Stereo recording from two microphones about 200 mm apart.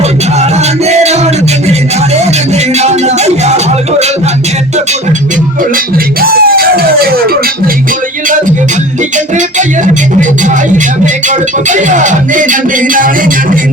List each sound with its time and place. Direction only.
0.9 s music: 35° right (ahead or behind)
2.7 s music: 35° right (ahead or behind)
5.7 s music: 50° right (ahead or behind)
9.1 s music: 40° right (ahead or behind)